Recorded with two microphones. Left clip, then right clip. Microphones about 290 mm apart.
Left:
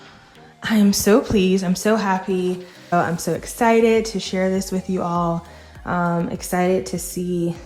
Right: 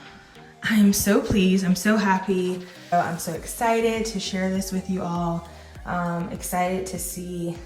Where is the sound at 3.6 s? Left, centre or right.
Left.